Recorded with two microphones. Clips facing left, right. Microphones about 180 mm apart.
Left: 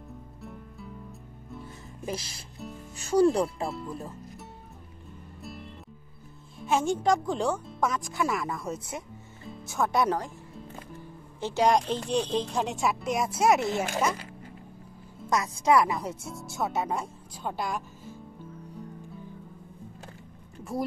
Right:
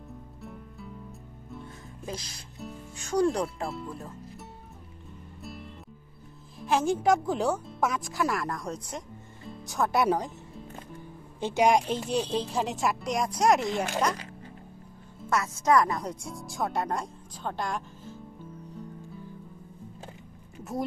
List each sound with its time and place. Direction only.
0.4 s music: centre (ahead or behind)
2.0 s speech: 5° left (ahead or behind)
5.4 s music: centre (ahead or behind)
6.6 s speech: centre (ahead or behind)
10.0 s speech: 15° right (ahead or behind)
11.3 s speech: 15° right (ahead or behind); by 13.9 s 5° left (ahead or behind)
15.2 s speech: 15° left (ahead or behind)